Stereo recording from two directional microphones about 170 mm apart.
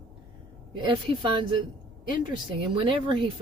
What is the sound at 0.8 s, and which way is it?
Speech, 30° right (ahead or behind).